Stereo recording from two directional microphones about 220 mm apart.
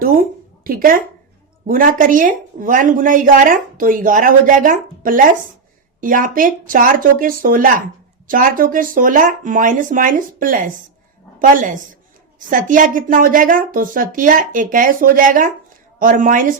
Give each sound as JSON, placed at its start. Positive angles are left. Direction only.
{"t": 0.0, "sound": "a woman's voice", "side_deg": -40}